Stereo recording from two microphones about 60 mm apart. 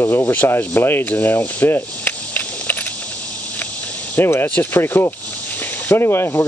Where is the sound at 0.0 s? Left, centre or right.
Left.